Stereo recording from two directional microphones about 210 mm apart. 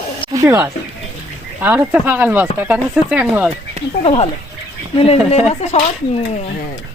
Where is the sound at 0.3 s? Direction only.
15° right (ahead or behind).